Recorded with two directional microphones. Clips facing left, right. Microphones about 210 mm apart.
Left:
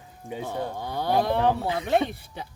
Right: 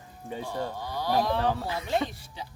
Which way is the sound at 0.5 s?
55° left (ahead or behind).